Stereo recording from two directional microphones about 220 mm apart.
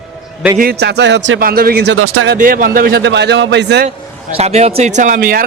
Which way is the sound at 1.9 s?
70° right (ahead or behind).